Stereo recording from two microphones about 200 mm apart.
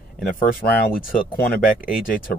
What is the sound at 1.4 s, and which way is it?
Speech, 45° left (ahead or behind).